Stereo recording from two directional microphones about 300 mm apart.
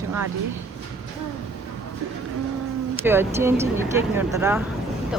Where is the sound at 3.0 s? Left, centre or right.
Centre.